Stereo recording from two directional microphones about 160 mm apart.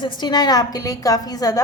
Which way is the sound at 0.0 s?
30° left (ahead or behind).